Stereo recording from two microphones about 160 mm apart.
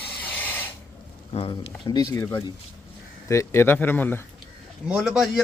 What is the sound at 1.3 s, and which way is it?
Speech, 35° left (ahead or behind).